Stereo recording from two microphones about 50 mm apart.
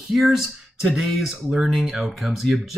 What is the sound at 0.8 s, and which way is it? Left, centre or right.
Speech, centre.